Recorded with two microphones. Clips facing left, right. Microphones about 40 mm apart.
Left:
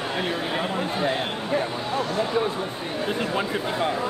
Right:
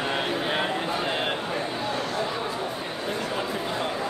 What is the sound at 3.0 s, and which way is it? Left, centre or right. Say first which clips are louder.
Chatter: left 4 dB; left.